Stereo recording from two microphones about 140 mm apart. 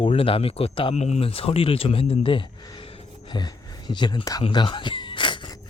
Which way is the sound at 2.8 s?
45° left (ahead or behind).